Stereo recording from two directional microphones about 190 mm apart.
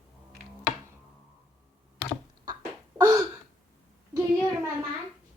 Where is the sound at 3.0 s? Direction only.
20° right (ahead or behind).